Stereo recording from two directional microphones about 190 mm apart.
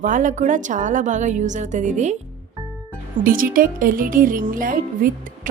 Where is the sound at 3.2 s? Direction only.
45° right (ahead or behind).